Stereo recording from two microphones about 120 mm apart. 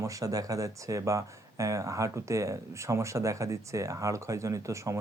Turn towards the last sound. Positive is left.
turn(degrees=-25)  # may be behind; listen again after turning